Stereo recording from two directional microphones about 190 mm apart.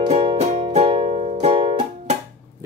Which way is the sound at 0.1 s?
30° right (ahead or behind).